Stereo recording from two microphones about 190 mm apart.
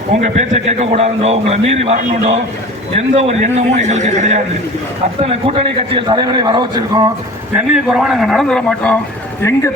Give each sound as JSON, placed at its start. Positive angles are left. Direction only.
{"t": 0.2, "sound": "a man's voice", "side_deg": -40}
{"t": 7.5, "sound": "a man's voice", "side_deg": -5}